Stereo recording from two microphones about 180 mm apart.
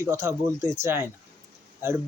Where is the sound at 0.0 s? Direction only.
15° right (ahead or behind).